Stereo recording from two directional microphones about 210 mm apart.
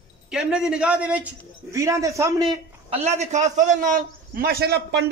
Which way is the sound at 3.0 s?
35° right (ahead or behind).